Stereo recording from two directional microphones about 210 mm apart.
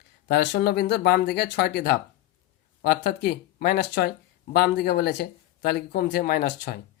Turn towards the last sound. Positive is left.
turn(degrees=45)  # may be behind; listen again after turning